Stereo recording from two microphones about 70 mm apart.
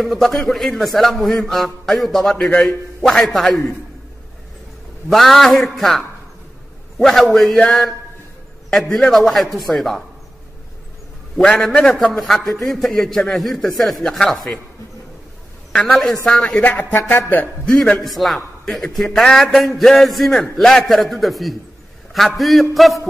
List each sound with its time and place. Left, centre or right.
0.0 s a man's voice: centre
5.1 s a man's voice: centre
8.6 s a man's voice: centre
11.4 s a man's voice: centre
15.7 s a woman's voice: centre
16.4 s speech: centre
17.6 s a man's voice: centre